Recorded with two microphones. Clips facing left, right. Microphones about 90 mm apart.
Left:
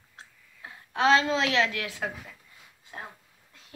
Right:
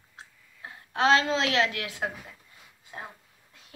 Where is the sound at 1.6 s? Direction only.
30° left (ahead or behind).